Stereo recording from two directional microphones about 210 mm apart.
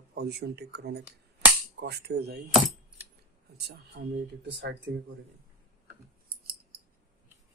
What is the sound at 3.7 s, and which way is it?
Speech, 50° right (ahead or behind).